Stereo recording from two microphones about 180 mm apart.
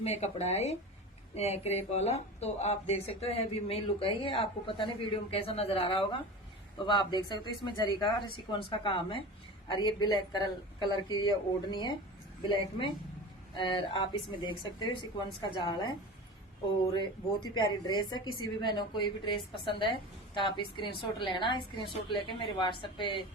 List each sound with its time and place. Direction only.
0.0 s a man's voice: 35° left (ahead or behind)